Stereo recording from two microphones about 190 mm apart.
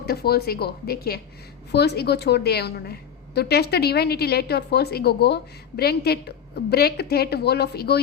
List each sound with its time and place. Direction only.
0.0 s a woman's voice: 55° left (ahead or behind)